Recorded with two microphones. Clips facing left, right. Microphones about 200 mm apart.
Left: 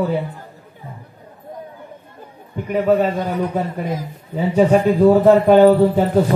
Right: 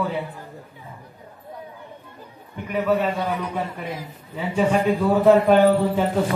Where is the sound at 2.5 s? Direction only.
45° left (ahead or behind).